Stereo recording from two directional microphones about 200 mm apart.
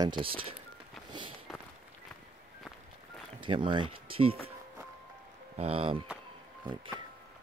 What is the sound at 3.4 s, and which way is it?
Speech, 25° right (ahead or behind).